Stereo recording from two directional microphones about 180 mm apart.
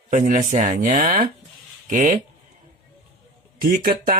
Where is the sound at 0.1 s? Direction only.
45° right (ahead or behind).